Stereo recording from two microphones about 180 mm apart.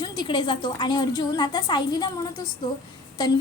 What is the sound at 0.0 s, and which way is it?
A woman's voice, 25° left (ahead or behind).